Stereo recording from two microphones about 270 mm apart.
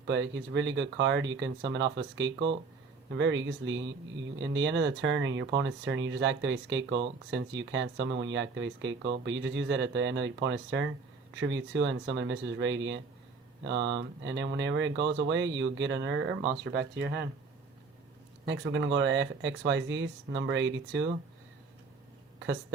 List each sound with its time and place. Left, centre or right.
0.1 s speech: right
18.4 s speech: right